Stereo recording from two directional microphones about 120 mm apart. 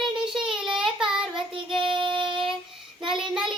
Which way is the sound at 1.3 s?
45° right (ahead or behind).